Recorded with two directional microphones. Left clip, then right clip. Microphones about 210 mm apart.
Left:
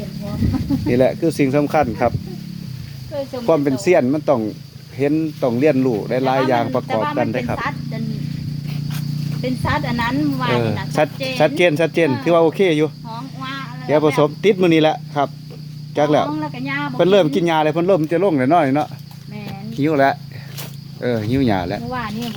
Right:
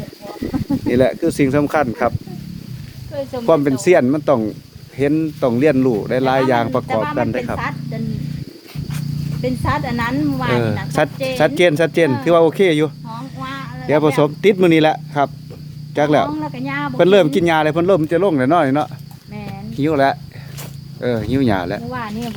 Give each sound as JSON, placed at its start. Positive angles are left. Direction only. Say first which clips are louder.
{"t": 0.9, "sound": "speech", "louder": "right 1 dB", "side_deg": -15}
{"t": 3.4, "sound": "speech", "louder": "right 2 dB", "side_deg": -15}
{"t": 9.4, "sound": "speech", "louder": "right 1 dB", "side_deg": -10}
{"t": 19.8, "sound": "speech", "louder": "even", "side_deg": 10}
{"t": 21.4, "sound": "speech", "louder": "right 1 dB", "side_deg": -15}